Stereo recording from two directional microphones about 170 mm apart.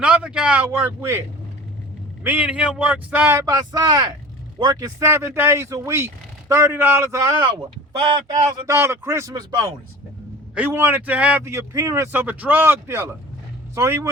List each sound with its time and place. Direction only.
0.0 s a man's voice: 5° right (ahead or behind)
2.2 s a man's voice: 10° right (ahead or behind)
8.0 s speech: 30° right (ahead or behind)
8.6 s a man's voice: 15° right (ahead or behind)
10.5 s a man's voice: 10° right (ahead or behind)